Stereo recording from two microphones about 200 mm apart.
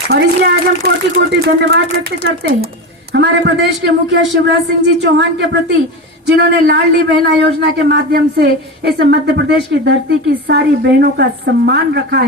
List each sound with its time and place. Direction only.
0.1 s a man's voice: 55° right (ahead or behind)